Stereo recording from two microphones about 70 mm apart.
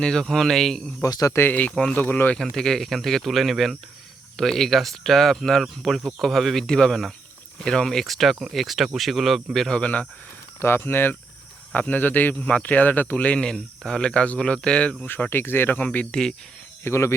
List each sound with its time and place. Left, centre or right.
0.0 s speech: centre
1.0 s speech: left
1.4 s a man's voice: left
2.0 s a man's voice: left
2.3 s speech: centre
9.8 s a man's voice: centre
10.6 s a man's voice: left; by 14.9 s centre
15.0 s a man's voice: left
16.8 s speech: left